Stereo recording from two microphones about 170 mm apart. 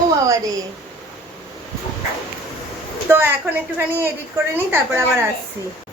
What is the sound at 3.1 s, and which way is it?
Speech, 15° right (ahead or behind).